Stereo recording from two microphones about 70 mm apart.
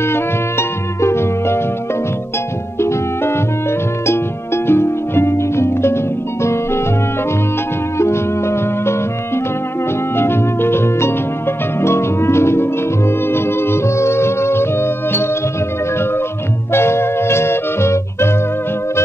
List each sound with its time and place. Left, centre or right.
0.0 s music: left
2.8 s music: left
4.6 s harp: left
6.4 s music: left
8.0 s music: left
16.7 s music: left